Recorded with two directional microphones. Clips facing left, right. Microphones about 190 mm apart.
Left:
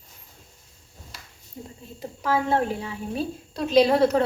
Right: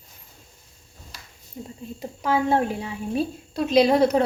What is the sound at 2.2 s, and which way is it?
A woman's voice, 15° right (ahead or behind).